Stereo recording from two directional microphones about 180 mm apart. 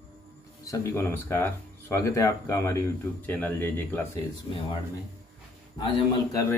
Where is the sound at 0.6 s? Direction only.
15° left (ahead or behind).